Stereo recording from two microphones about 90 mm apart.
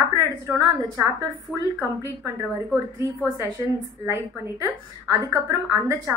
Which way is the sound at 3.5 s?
35° right (ahead or behind).